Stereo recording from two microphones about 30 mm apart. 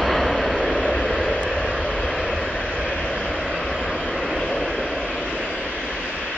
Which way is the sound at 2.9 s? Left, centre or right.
Left.